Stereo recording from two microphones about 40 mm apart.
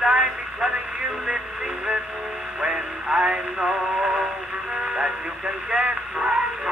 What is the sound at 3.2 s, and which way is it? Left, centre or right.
Synthetic singing, right.